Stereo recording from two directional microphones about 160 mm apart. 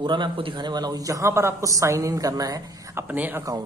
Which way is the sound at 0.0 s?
30° right (ahead or behind).